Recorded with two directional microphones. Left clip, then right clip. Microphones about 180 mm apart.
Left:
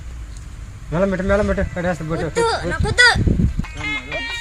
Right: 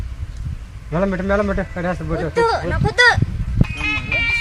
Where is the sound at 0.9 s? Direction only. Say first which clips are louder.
Left 1 dB; 30° left (ahead or behind).